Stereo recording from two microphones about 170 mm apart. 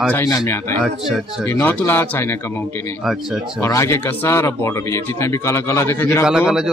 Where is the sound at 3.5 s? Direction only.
15° left (ahead or behind).